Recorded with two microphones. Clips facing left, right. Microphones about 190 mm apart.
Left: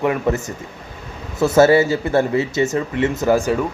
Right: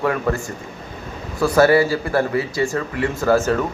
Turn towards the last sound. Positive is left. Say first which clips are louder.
# even
turn(degrees=15)  # may be behind; listen again after turning